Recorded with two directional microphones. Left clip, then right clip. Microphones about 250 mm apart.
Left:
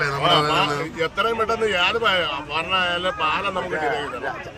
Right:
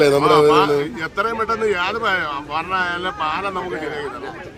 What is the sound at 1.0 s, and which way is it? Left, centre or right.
Speech, centre.